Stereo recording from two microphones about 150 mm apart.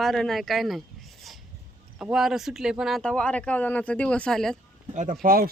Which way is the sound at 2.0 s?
5° right (ahead or behind).